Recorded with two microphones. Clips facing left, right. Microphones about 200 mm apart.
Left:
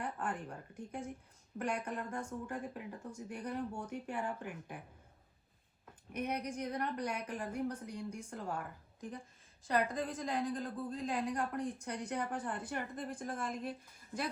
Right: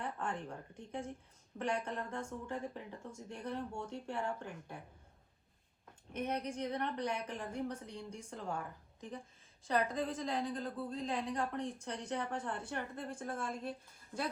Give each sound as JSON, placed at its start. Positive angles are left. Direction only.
{"t": 0.0, "sound": "a woman's voice", "side_deg": 0}
{"t": 6.1, "sound": "a woman's voice", "side_deg": 10}
{"t": 12.5, "sound": "a woman's voice", "side_deg": 15}